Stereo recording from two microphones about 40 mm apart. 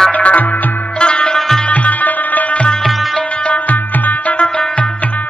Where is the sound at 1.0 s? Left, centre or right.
Left.